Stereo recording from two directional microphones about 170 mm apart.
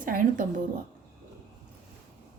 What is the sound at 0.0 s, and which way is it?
Speech, 55° right (ahead or behind).